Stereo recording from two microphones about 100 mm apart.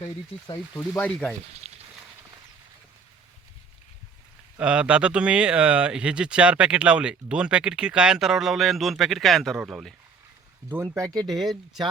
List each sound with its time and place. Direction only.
0.8 s speech: 20° left (ahead or behind)
4.6 s speech: 10° right (ahead or behind)
10.8 s speech: 35° right (ahead or behind)
11.1 s speech: 5° left (ahead or behind)